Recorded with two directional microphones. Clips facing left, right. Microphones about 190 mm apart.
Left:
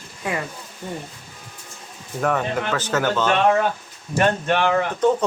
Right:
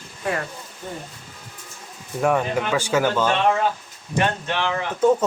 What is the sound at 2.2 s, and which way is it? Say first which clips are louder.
Speech: right 2 dB; 10° right (ahead or behind).